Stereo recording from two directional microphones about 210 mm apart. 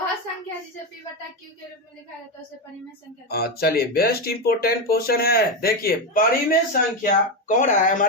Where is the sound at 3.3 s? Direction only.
50° left (ahead or behind).